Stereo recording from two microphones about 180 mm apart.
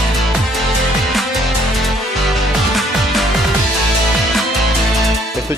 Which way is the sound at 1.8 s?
Centre (ahead or behind).